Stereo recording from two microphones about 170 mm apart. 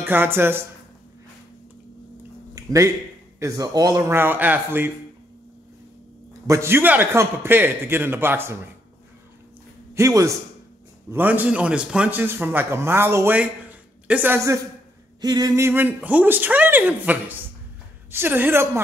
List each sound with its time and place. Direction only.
0.0 s a man's voice: 10° right (ahead or behind)
2.5 s a sound: 20° right (ahead or behind)
3.3 s a man's voice: 20° right (ahead or behind)
6.4 s a man's voice: 15° right (ahead or behind)
9.9 s a man's voice: 20° right (ahead or behind)